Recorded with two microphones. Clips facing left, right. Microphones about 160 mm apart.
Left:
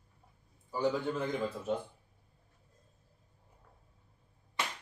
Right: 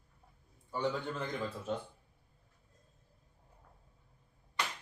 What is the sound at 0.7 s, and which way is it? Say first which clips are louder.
A man's voice: left 4 dB; 5° left (ahead or behind).